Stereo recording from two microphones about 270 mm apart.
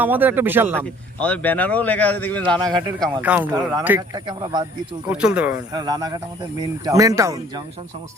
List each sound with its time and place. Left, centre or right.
0.0 s speech: centre
1.2 s speech: centre
2.6 s speech: centre
5.0 s speech: centre